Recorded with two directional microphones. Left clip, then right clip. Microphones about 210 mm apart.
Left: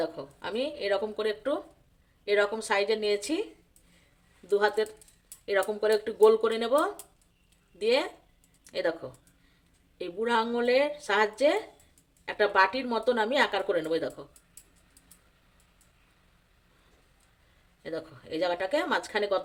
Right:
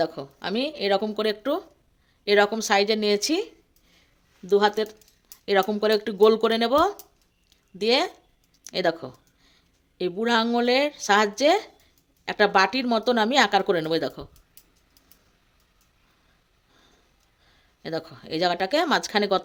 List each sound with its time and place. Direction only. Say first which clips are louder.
0.0 s speech: right 6 dB; 45° right (ahead or behind)
4.4 s speech: right 5 dB; 40° right (ahead or behind)
17.8 s speech: right 5 dB; 50° right (ahead or behind)